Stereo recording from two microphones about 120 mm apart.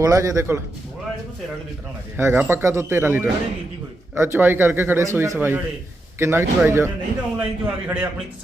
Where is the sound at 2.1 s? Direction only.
15° right (ahead or behind).